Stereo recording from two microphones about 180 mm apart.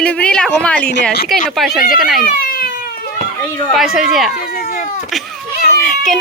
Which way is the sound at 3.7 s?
Centre (ahead or behind).